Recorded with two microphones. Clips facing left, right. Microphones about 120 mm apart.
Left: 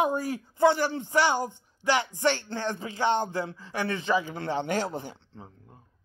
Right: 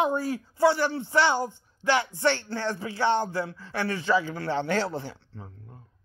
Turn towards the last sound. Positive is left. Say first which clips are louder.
# right 2 dB
turn(degrees=15)  # may be behind; listen again after turning